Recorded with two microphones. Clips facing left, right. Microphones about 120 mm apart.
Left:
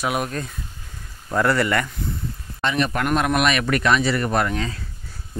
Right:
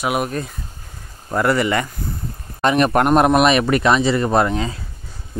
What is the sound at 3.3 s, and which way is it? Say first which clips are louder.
Speech: right 6 dB; 30° right (ahead or behind).